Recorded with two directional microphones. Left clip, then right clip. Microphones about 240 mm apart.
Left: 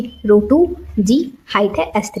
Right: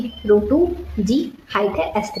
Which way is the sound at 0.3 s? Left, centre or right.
Left.